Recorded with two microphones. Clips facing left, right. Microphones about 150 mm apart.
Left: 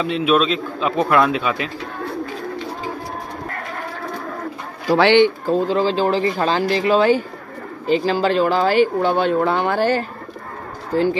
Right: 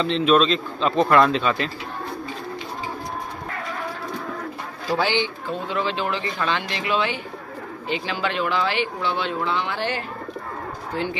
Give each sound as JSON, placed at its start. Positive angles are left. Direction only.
{"t": 0.0, "sound": "a man's voice", "side_deg": 10}
{"t": 4.8, "sound": "speech", "side_deg": 80}
{"t": 5.5, "sound": "speech", "side_deg": 35}